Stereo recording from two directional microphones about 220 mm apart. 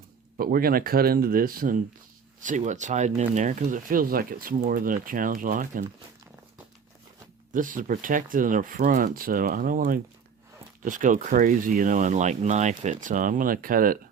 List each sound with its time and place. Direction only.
0.3 s speech: 40° right (ahead or behind)
7.5 s speech: 35° right (ahead or behind)